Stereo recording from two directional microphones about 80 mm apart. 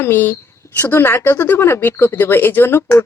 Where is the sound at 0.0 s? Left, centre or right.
Left.